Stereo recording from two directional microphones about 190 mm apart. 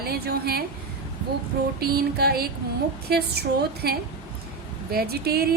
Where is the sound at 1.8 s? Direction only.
55° right (ahead or behind).